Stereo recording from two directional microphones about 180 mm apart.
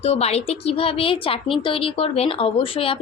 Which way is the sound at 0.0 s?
35° left (ahead or behind).